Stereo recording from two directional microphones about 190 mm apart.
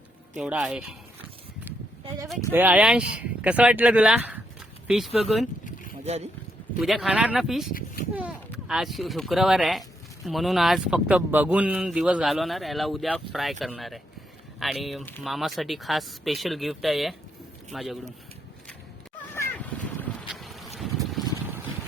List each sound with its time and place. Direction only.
0.3 s speech: 5° right (ahead or behind)
2.5 s speech: 10° right (ahead or behind)
6.8 s speech: centre (ahead or behind)
7.7 s speech: 50° left (ahead or behind)
8.1 s speech: 5° right (ahead or behind)
19.3 s a sound: 10° left (ahead or behind)
20.2 s boat: centre (ahead or behind)